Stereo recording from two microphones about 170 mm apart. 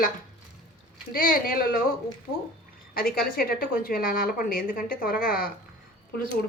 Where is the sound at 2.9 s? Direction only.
60° left (ahead or behind).